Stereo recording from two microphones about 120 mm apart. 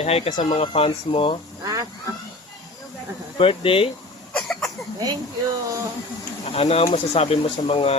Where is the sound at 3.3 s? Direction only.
50° left (ahead or behind).